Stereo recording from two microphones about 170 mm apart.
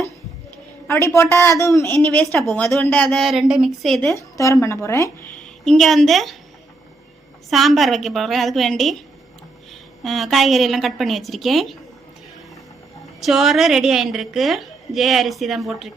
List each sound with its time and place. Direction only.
0.9 s speech: 15° left (ahead or behind)
2.0 s a woman's voice: 5° left (ahead or behind)
4.0 s speech: 15° left (ahead or behind)
5.6 s a woman's voice: centre (ahead or behind)
7.5 s a woman's voice: centre (ahead or behind)
10.0 s a woman's voice: centre (ahead or behind)
13.1 s a woman's voice: centre (ahead or behind)